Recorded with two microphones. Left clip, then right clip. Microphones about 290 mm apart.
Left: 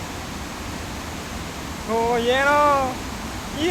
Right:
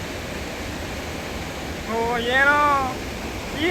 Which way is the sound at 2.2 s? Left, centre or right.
Centre.